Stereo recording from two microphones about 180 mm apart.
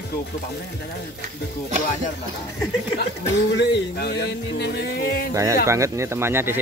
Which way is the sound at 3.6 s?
70° left (ahead or behind).